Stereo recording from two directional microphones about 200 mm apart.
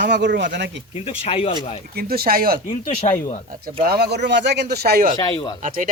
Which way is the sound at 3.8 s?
55° right (ahead or behind).